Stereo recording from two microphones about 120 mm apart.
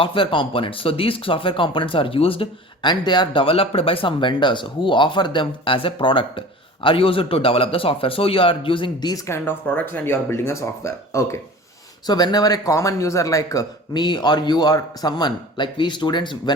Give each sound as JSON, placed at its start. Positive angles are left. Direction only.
{"t": 0.0, "sound": "speech", "side_deg": 45}
{"t": 12.0, "sound": "speech", "side_deg": 35}